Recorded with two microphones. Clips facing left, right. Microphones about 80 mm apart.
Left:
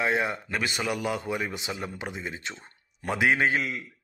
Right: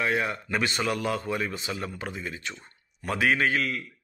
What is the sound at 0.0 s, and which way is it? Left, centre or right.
Speech, left.